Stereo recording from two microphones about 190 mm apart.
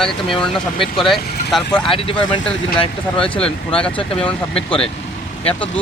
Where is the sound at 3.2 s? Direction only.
5° left (ahead or behind).